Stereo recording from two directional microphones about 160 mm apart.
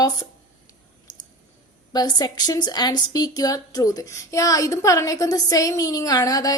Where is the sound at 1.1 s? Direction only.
25° left (ahead or behind).